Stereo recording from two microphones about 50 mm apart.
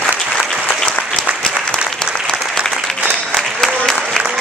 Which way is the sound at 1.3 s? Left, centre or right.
Right.